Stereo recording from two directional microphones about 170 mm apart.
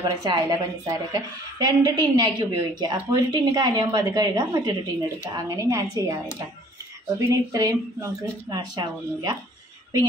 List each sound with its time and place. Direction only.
0.0 s a woman's voice: 25° right (ahead or behind)
7.2 s a woman's voice: 20° right (ahead or behind)